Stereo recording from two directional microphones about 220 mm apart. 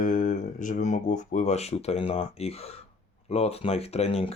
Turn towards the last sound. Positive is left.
turn(degrees=25)  # may be behind; listen again after turning